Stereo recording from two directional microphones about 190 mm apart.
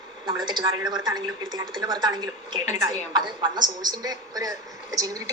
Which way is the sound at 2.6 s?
35° left (ahead or behind).